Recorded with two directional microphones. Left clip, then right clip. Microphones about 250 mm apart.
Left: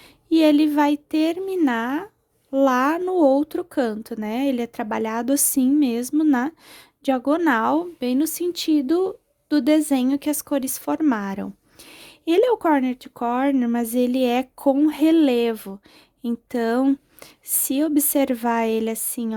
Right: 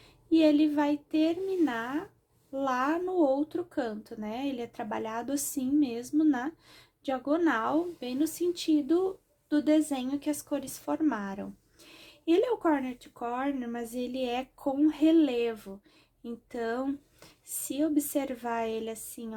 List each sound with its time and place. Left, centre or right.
0.3 s speech: left